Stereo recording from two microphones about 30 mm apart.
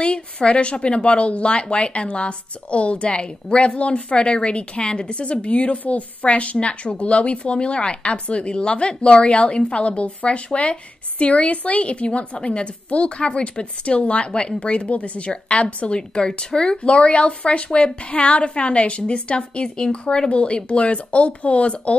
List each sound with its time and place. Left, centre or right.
0.0 s a woman's voice: left
6.6 s speech: left
16.2 s speech: left
16.9 s speech: left
20.2 s speech: left